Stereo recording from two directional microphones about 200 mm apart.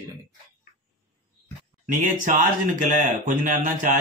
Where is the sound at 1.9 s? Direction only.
40° right (ahead or behind).